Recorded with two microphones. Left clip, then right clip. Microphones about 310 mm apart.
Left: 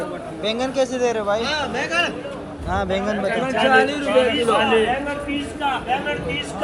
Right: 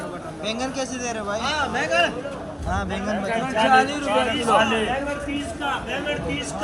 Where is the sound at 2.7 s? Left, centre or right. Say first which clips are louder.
Left 5 dB; centre.